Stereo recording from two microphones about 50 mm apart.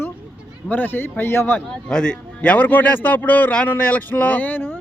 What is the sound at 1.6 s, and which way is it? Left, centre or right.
Speech, centre.